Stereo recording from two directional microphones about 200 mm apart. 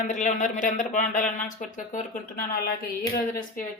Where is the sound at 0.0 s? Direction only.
40° left (ahead or behind).